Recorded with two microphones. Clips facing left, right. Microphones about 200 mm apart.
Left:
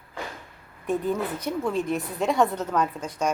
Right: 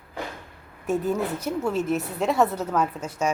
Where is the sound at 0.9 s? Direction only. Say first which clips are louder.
Right 1 dB; 5° right (ahead or behind).